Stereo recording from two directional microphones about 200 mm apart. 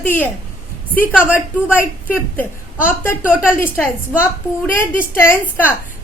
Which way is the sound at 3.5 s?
10° left (ahead or behind).